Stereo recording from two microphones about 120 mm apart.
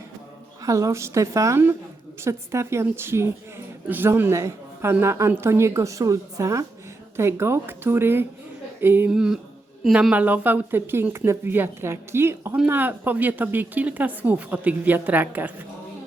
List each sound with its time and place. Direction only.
0.6 s a woman's voice: 25° right (ahead or behind)
9.1 s a sound: 5° right (ahead or behind)
9.8 s speech: 5° right (ahead or behind)